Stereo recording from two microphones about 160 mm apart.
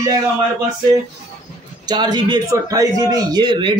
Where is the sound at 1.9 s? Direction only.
25° right (ahead or behind).